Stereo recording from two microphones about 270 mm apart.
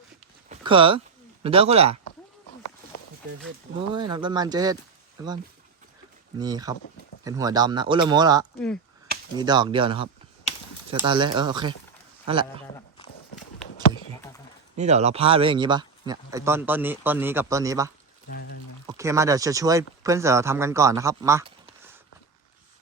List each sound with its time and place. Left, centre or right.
0.4 s a sound: right
3.8 s speech: centre
6.4 s speech: centre
8.5 s speech: centre
9.4 s a man's voice: centre
14.8 s speech: right
18.3 s pour: left
18.9 s speech: centre